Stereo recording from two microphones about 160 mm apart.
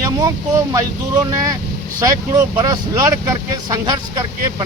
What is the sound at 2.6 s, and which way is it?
Speech, 20° right (ahead or behind).